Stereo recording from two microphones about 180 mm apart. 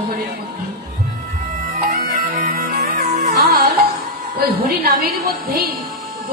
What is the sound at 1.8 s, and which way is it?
Music, 50° right (ahead or behind).